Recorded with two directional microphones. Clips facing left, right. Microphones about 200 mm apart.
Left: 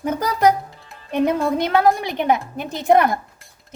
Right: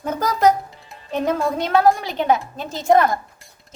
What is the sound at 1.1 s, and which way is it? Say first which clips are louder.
Speech: left 2 dB; 15° left (ahead or behind).